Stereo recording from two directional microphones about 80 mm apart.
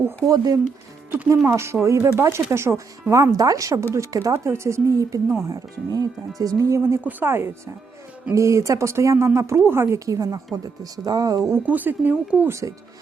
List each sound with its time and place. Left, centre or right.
0.3 s a woman's voice: right
1.5 s a woman's voice: right
6.6 s speech: right
7.0 s speech: right
10.1 s a woman's voice: right
11.6 s speech: right
12.5 s speech: right